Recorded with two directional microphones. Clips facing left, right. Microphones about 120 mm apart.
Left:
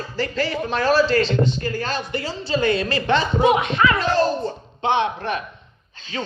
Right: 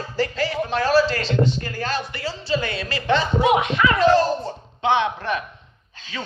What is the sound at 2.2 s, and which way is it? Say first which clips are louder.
Speech: left 5 dB; 35° left (ahead or behind).